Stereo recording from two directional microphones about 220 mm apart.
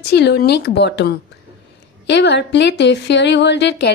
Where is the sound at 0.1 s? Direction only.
50° left (ahead or behind).